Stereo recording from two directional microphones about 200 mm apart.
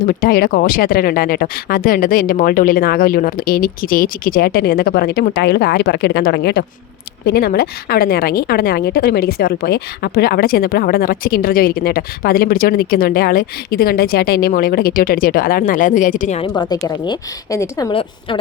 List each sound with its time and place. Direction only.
0.0 s a woman's voice: 45° left (ahead or behind)
16.4 s speech: 20° left (ahead or behind)